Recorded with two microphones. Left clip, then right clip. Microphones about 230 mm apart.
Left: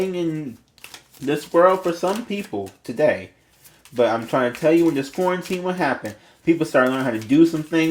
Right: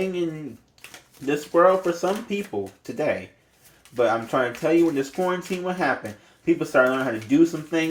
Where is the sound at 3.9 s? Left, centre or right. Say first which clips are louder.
Left 2 dB; left.